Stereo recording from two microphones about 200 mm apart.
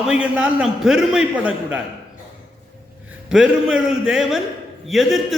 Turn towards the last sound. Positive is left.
turn(degrees=0)  # may be behind; listen again after turning